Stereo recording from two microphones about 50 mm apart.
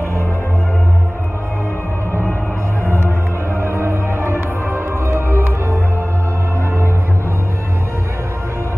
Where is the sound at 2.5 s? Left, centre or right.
Right.